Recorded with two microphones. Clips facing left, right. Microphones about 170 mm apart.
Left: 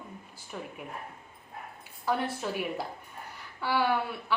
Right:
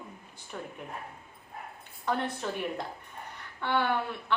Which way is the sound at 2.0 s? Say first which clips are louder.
Left 1 dB; 5° left (ahead or behind).